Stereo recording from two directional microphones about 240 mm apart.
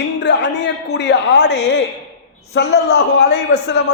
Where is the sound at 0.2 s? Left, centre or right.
Left.